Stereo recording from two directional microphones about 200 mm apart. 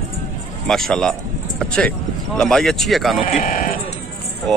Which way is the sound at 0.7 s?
Centre (ahead or behind).